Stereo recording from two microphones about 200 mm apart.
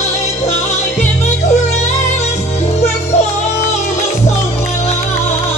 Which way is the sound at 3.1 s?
35° left (ahead or behind).